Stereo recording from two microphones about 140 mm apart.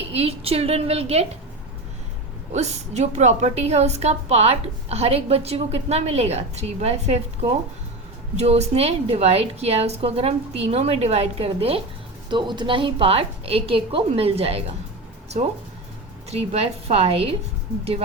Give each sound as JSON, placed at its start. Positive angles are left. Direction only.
{"t": 0.1, "sound": "a woman's voice", "side_deg": -45}
{"t": 2.5, "sound": "a woman's voice", "side_deg": -55}
{"t": 12.3, "sound": "a woman's voice", "side_deg": -35}
{"t": 16.3, "sound": "a woman's voice", "side_deg": -45}